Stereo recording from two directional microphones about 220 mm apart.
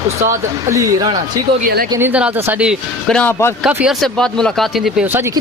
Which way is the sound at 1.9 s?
10° right (ahead or behind).